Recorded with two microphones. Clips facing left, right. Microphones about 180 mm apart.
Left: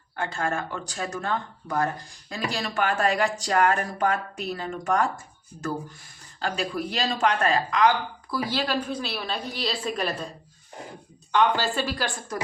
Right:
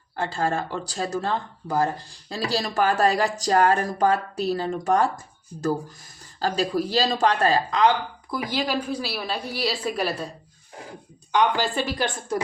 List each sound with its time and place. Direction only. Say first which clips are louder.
0.2 s speech: right 3 dB; 30° right (ahead or behind); by 10.2 s 10° right (ahead or behind)
11.3 s speech: right 1 dB; 15° right (ahead or behind)